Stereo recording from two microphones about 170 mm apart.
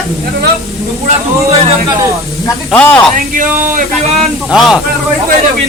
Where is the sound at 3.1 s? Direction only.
50° right (ahead or behind).